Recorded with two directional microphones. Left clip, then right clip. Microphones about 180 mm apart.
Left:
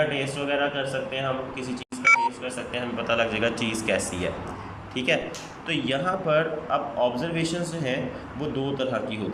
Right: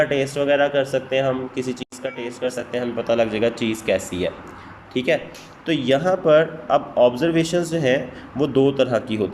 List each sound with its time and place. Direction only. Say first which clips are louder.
0.0 s speech: right 6 dB; 35° right (ahead or behind)